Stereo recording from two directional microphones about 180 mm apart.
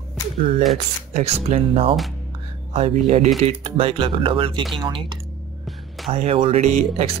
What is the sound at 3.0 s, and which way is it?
Speech, 35° right (ahead or behind).